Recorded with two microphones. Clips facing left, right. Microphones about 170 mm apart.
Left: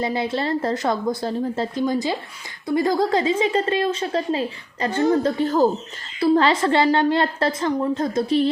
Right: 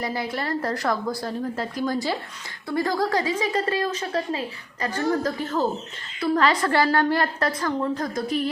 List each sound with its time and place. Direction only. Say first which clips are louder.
0.0 s a woman's voice: left 5 dB; 25° left (ahead or behind)